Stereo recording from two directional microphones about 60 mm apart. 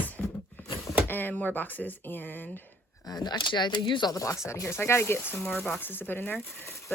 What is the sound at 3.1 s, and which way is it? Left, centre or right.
Speech, left.